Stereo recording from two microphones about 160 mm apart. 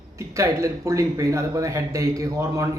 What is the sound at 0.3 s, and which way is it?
Speech, 20° right (ahead or behind).